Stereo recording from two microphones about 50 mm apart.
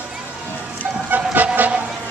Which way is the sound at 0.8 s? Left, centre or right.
Right.